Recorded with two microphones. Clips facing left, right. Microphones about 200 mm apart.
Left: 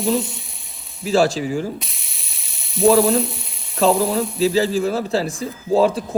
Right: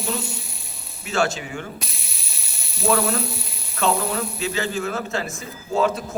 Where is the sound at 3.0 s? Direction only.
Centre (ahead or behind).